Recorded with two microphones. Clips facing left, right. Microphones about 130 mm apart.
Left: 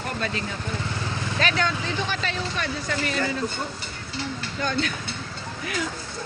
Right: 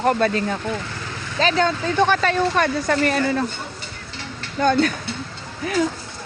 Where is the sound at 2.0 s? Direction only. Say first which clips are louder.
Right 11 dB; 55° right (ahead or behind).